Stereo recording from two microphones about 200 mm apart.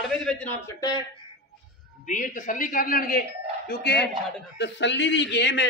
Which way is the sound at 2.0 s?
40° left (ahead or behind).